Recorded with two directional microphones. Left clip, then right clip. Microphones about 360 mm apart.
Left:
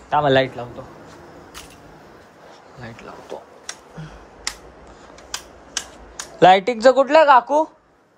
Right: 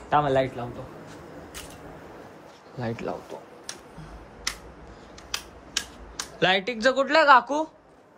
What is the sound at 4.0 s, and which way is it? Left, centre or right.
Computer keyboard, left.